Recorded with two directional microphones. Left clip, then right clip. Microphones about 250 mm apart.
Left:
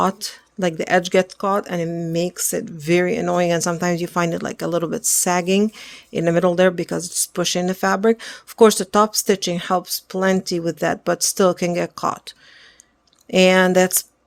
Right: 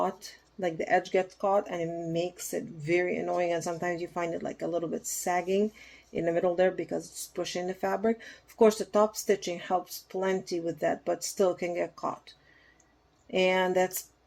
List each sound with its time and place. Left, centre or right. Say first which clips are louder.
0.6 s speech: left 9 dB; left
13.3 s speech: left 11 dB; left